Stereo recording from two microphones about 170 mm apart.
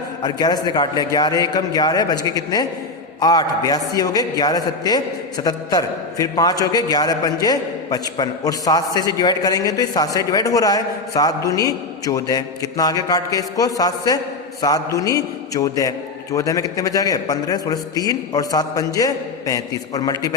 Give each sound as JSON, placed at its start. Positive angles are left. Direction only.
{"t": 0.2, "sound": "a man's voice", "side_deg": 25}